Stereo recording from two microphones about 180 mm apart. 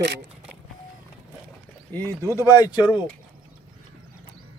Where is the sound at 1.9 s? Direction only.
10° left (ahead or behind).